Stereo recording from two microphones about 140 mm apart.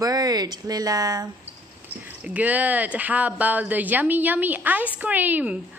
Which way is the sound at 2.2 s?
10° right (ahead or behind).